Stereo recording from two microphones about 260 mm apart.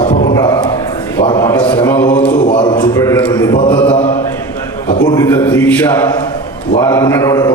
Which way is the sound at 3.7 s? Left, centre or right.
Centre.